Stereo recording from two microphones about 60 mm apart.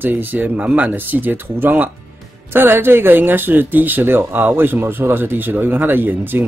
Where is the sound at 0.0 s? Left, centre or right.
Right.